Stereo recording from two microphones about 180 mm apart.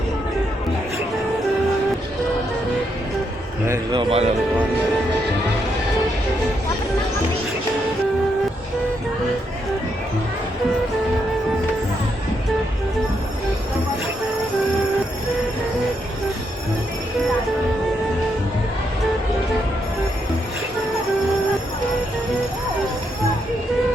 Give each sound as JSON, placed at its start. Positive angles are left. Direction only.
{"t": 3.9, "sound": "speech", "side_deg": -35}